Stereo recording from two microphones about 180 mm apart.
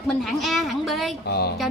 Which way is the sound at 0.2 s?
Centre (ahead or behind).